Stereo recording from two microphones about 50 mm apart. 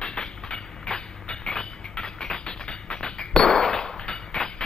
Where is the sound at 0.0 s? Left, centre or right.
Centre.